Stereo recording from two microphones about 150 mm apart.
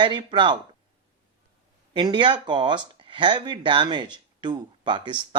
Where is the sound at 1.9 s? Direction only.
30° right (ahead or behind).